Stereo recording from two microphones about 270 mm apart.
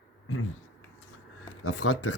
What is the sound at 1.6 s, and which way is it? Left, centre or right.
Speech, left.